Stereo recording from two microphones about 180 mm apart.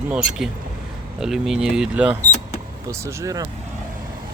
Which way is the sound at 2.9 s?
15° right (ahead or behind).